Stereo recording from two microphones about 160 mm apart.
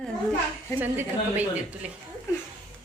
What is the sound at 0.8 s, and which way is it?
Speech, 10° right (ahead or behind).